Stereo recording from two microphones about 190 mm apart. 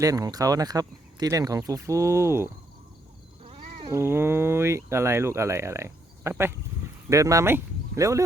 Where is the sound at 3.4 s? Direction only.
30° right (ahead or behind).